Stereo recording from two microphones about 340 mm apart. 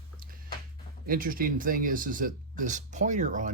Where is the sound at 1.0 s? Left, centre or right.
Right.